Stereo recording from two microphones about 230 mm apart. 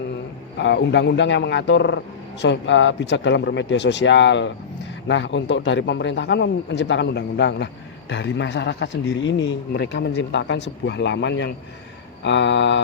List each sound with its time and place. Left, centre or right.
0.6 s a man's voice: left